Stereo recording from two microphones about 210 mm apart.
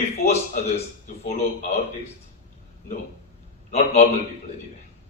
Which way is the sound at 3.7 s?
30° left (ahead or behind).